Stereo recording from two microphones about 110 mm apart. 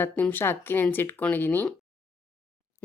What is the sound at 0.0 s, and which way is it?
Speech, 20° left (ahead or behind).